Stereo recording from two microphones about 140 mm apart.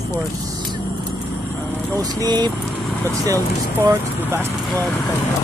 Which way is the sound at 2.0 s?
30° right (ahead or behind).